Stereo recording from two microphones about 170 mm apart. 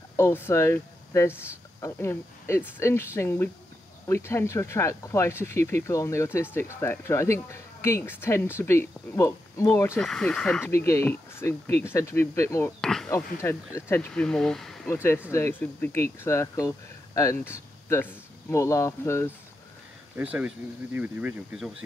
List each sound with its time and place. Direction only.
0.1 s speech: 15° left (ahead or behind)
9.9 s speech: 5° left (ahead or behind)
12.8 s speech: 5° left (ahead or behind)
13.1 s speech: 15° left (ahead or behind)
14.9 s speech: 15° left (ahead or behind)
20.2 s speech: 10° right (ahead or behind)